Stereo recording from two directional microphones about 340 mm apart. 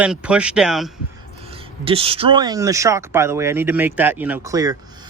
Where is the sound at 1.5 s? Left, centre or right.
Centre.